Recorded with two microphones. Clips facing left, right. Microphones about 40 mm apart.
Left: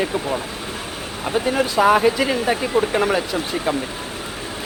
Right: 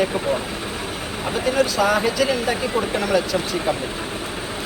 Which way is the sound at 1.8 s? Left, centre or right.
Left.